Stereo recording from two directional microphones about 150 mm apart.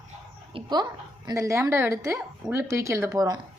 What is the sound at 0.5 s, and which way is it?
Speech, 30° right (ahead or behind).